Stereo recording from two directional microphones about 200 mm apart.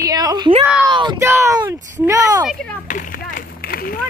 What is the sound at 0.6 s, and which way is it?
Speech, 5° right (ahead or behind).